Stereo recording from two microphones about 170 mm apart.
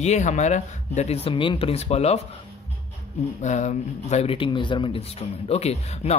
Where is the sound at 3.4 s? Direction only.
45° left (ahead or behind).